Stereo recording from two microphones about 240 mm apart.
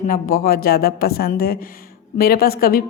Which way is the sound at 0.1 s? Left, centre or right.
Left.